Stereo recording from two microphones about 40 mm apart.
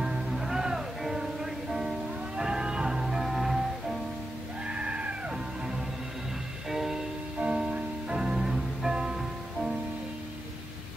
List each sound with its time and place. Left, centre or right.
0.0 s music: centre
2.3 s music: right
3.3 s music: centre
4.6 s screaming: right
6.7 s music: centre
7.3 s music: right